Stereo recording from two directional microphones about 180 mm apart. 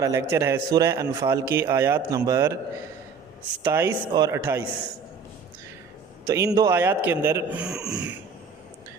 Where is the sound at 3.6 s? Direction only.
15° right (ahead or behind).